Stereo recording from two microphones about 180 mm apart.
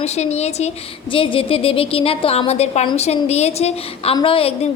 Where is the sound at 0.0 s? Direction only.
35° left (ahead or behind).